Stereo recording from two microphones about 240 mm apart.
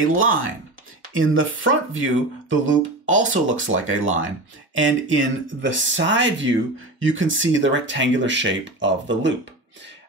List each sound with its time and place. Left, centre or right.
0.0 s speech: right
2.6 s speech: right
3.7 s speech: right